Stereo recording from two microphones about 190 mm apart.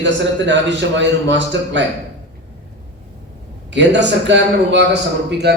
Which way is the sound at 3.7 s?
70° right (ahead or behind).